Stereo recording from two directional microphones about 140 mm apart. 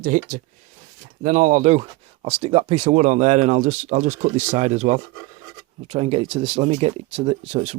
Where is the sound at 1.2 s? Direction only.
65° right (ahead or behind).